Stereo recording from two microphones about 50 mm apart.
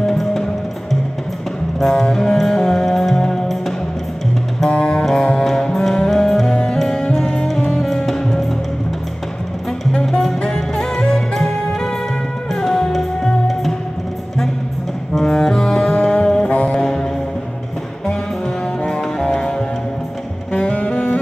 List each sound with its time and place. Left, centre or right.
0.0 s music: centre
1.8 s music: centre
4.6 s music: centre
10.0 s music: centre
10.4 s music: centre
15.1 s music: centre
16.4 s music: left
16.7 s music: centre
18.9 s music: centre
20.5 s saxophone: left